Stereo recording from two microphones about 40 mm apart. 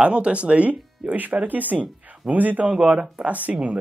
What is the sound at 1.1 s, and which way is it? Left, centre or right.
Speech, right.